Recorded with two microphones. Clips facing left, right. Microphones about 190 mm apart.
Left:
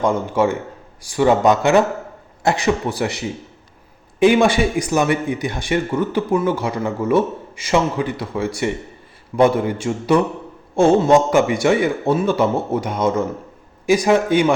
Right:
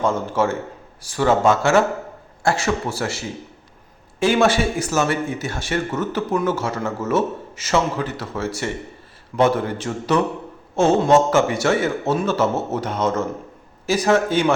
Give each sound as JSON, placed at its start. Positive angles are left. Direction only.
{"t": 0.0, "sound": "speech", "side_deg": 15}